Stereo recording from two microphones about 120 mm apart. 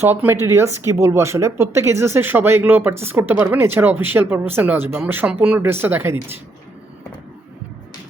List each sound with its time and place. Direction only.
0.0 s speech: 20° right (ahead or behind)